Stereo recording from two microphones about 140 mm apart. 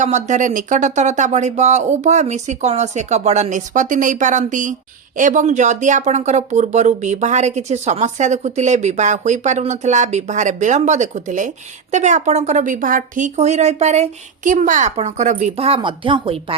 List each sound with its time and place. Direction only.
0.0 s speech: 60° right (ahead or behind)
14.5 s speech: 65° right (ahead or behind); by 16.6 s 40° right (ahead or behind)